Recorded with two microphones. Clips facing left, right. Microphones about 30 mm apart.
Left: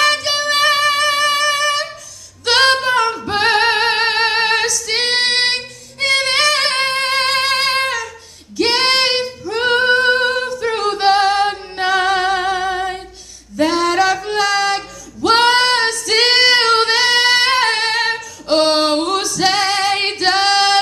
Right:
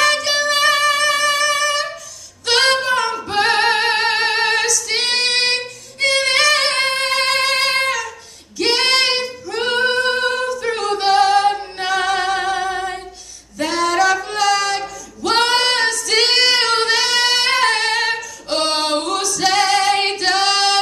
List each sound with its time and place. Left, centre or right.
0.1 s music: centre
2.4 s singing: centre
8.5 s female singing: centre
9.9 s singing: centre
11.7 s music: centre
12.4 s a sound: centre
13.6 s female singing: centre
18.1 s singing: centre
19.0 s a capella: centre
20.2 s singing: centre